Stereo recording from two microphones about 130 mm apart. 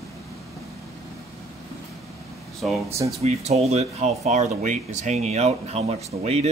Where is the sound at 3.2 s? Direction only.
55° right (ahead or behind).